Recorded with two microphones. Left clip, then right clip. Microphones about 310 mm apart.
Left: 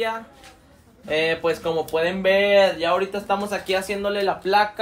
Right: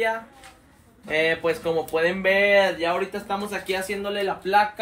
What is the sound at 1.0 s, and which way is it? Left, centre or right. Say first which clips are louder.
A man's voice: left 1 dB; centre.